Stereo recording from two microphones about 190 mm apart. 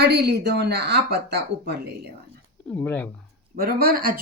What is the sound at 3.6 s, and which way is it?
Speech, 50° right (ahead or behind).